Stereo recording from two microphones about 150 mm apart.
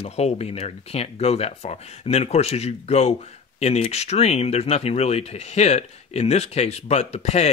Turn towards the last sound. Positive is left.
turn(degrees=45)  # may be behind; listen again after turning